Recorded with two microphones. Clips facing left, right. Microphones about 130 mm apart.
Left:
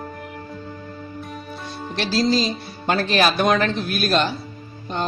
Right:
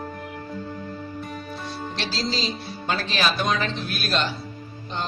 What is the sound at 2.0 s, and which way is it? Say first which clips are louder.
Speech: left 9 dB; 50° left (ahead or behind).